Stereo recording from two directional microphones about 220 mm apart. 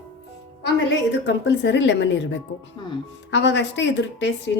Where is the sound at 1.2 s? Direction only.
55° left (ahead or behind).